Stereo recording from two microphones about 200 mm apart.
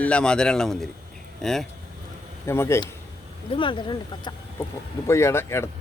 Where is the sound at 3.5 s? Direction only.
25° left (ahead or behind).